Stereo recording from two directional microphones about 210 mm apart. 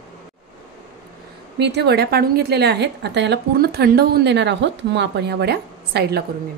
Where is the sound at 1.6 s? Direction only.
55° right (ahead or behind).